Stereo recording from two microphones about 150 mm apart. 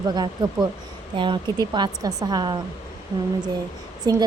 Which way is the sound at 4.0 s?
25° right (ahead or behind).